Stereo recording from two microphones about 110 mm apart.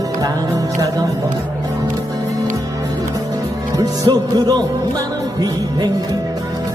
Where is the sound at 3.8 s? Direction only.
35° right (ahead or behind).